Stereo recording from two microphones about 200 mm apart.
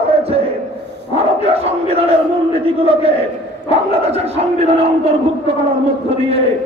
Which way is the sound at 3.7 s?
30° right (ahead or behind).